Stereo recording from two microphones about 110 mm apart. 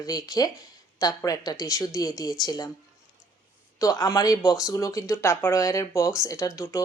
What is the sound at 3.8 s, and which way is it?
Speech, 30° left (ahead or behind).